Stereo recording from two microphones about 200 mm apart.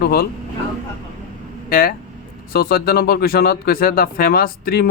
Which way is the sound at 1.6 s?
45° left (ahead or behind).